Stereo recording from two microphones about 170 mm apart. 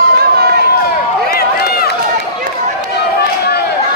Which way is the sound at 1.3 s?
65° left (ahead or behind).